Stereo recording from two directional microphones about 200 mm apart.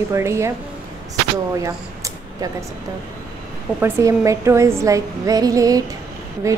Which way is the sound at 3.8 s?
15° right (ahead or behind).